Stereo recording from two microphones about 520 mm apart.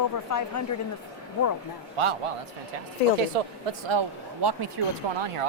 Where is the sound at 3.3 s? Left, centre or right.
Right.